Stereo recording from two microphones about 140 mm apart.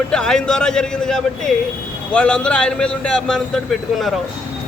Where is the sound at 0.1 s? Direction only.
5° left (ahead or behind).